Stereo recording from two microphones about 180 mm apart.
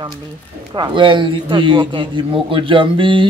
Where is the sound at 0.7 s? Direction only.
25° right (ahead or behind).